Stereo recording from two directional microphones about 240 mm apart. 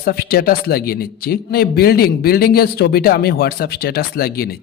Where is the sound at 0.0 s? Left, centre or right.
Left.